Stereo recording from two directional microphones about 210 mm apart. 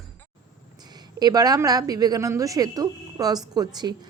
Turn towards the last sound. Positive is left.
turn(degrees=-20)  # may be behind; listen again after turning